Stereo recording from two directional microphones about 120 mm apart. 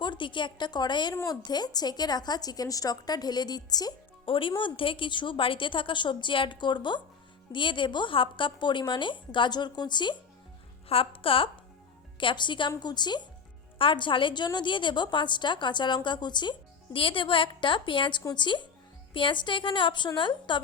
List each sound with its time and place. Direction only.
0.0 s a woman's voice: 40° left (ahead or behind)
4.3 s a woman's voice: 45° left (ahead or behind)
10.8 s a woman's voice: 50° left (ahead or behind)